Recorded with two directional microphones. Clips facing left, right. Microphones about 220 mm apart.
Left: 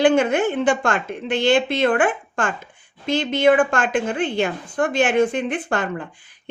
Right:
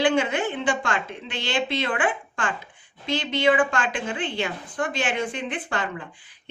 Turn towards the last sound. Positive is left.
turn(degrees=45)  # may be behind; listen again after turning